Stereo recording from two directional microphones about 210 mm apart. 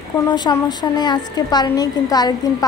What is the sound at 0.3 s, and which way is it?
A woman's voice, 20° left (ahead or behind).